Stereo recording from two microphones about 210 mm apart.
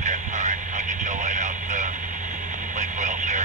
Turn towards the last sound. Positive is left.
turn(degrees=-35)  # may be behind; listen again after turning